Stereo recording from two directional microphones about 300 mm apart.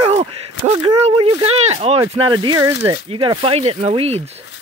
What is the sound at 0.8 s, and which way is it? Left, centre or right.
Speech, centre.